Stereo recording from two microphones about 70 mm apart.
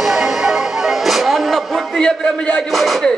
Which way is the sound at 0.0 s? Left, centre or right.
Centre.